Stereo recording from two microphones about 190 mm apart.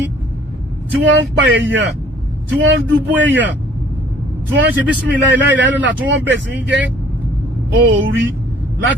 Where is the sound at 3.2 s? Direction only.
75° right (ahead or behind).